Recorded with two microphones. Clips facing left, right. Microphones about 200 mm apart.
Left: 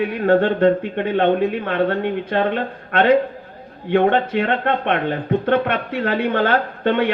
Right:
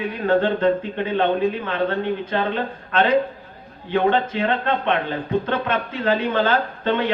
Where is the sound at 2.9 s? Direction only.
65° left (ahead or behind).